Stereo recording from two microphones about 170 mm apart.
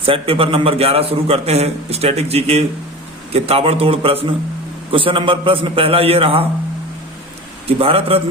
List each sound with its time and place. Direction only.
0.0 s a man's voice: 35° right (ahead or behind)
7.7 s a man's voice: 35° right (ahead or behind)